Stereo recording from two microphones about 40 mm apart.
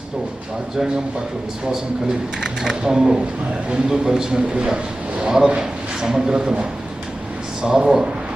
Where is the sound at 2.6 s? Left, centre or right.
Centre.